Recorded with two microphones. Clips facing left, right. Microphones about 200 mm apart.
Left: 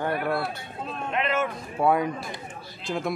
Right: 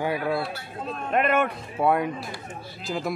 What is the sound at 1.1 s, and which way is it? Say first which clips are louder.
Speech: right 4 dB; 55° right (ahead or behind).